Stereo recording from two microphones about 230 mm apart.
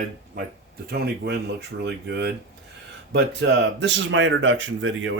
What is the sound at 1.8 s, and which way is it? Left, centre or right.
Speech, right.